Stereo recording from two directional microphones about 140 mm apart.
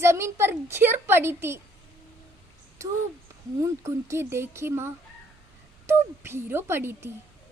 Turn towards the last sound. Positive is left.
turn(degrees=-20)  # may be behind; listen again after turning